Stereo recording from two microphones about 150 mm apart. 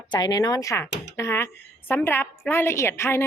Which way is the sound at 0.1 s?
25° left (ahead or behind).